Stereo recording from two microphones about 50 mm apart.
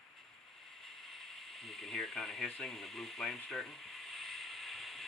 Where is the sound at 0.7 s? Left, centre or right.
Centre.